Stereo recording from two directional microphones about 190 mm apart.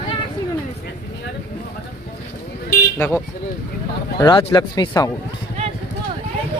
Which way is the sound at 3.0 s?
15° left (ahead or behind).